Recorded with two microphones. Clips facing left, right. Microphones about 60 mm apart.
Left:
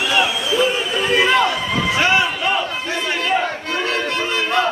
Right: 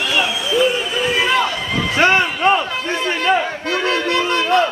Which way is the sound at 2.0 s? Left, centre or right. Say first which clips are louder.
Right 4 dB; right.